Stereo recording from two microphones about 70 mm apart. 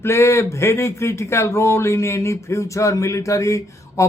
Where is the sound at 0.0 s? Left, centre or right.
Left.